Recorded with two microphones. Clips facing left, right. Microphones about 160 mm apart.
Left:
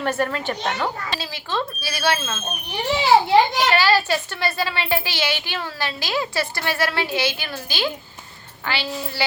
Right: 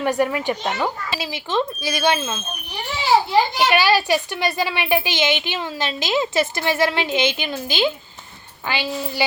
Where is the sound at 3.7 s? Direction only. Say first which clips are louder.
Right 1 dB; 15° right (ahead or behind).